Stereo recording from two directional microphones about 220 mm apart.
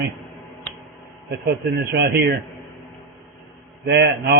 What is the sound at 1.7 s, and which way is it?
Speech, 45° right (ahead or behind).